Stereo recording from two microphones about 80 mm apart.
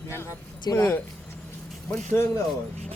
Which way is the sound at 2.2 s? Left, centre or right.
Left.